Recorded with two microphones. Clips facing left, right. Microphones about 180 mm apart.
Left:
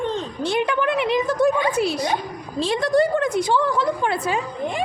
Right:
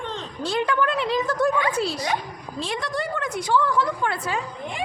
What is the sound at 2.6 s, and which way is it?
A woman's voice, 35° left (ahead or behind).